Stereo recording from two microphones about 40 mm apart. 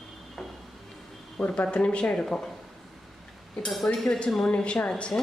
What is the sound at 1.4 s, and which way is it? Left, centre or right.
Speech, left.